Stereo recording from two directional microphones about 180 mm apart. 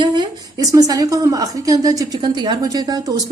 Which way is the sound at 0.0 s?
25° right (ahead or behind).